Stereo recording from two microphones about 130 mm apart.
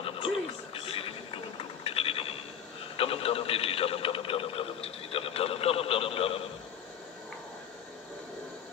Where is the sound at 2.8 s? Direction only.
45° left (ahead or behind).